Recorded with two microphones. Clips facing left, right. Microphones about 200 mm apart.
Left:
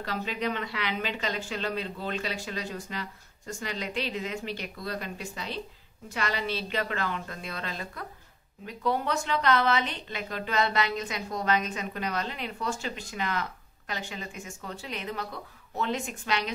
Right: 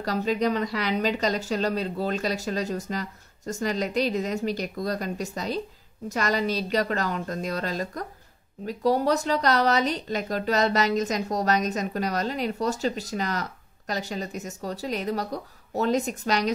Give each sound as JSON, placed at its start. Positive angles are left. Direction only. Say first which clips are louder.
{"t": 0.0, "sound": "a woman's voice", "louder": "right 7 dB", "side_deg": -40}